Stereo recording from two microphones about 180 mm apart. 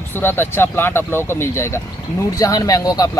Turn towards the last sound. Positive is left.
turn(degrees=20)  # may be behind; listen again after turning